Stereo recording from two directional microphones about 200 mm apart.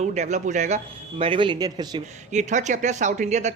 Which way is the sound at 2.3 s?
35° right (ahead or behind).